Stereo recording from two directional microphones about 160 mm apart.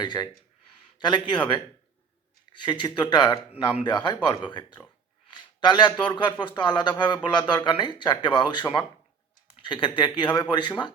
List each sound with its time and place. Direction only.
0.0 s a man's voice: 25° left (ahead or behind)